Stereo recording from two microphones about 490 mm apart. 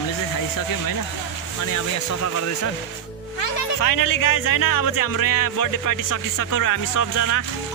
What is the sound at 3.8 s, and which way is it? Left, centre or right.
Music, left.